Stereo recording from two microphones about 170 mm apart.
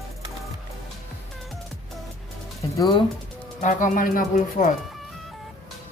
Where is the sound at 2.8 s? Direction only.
25° left (ahead or behind).